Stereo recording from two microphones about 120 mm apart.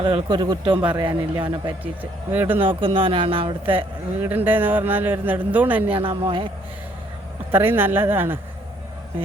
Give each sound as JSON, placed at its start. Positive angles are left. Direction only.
{"t": 0.0, "sound": "speech", "side_deg": -50}
{"t": 0.3, "sound": "a man's voice", "side_deg": -35}
{"t": 1.8, "sound": "speech", "side_deg": -15}
{"t": 2.8, "sound": "speech", "side_deg": -45}
{"t": 4.2, "sound": "speech", "side_deg": -15}
{"t": 6.0, "sound": "speech", "side_deg": -45}
{"t": 7.5, "sound": "speech", "side_deg": -20}